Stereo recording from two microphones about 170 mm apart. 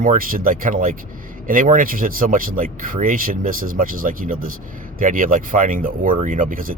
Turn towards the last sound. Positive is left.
turn(degrees=-50)  # may be behind; listen again after turning